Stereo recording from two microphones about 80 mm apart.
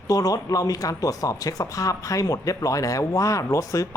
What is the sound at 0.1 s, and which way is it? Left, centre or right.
Speech, left.